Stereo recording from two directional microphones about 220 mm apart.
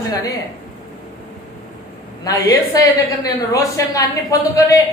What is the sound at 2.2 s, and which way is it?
A woman's voice, 15° left (ahead or behind).